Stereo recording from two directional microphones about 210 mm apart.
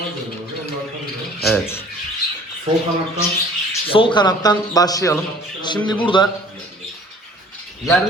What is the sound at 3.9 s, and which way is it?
Speech, 25° left (ahead or behind).